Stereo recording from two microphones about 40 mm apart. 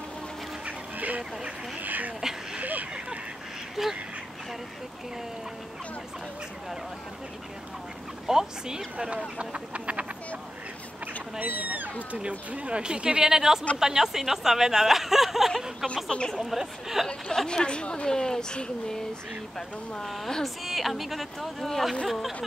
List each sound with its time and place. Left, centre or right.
0.7 s duck: right
1.8 s a sound: right
3.8 s speech: centre
8.3 s speech: centre
9.4 s duck: right
11.4 s cat: right
12.2 s speech: right; by 15.5 s centre
16.1 s a woman's voice: centre
16.3 s speech: centre
17.5 s speech: left
18.1 s a woman's voice: centre
20.4 s a woman's voice: centre